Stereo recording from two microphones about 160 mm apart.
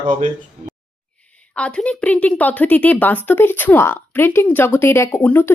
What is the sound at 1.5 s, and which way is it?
Speech, 5° left (ahead or behind).